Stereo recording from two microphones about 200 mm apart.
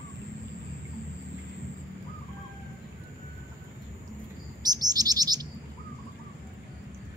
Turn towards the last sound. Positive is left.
turn(degrees=-20)  # may be behind; listen again after turning